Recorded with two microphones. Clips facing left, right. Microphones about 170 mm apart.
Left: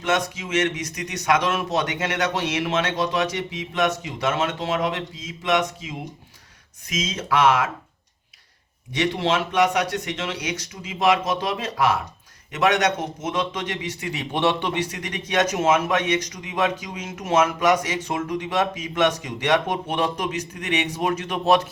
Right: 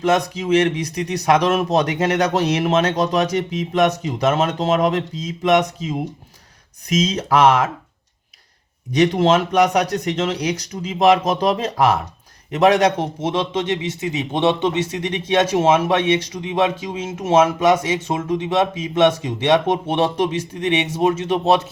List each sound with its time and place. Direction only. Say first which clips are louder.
0.0 s a man's voice: right 6 dB; 35° right (ahead or behind)
8.9 s a man's voice: right 7 dB; 40° right (ahead or behind)